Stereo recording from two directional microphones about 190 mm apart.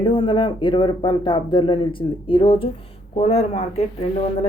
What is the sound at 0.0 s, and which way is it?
Speech, 25° left (ahead or behind).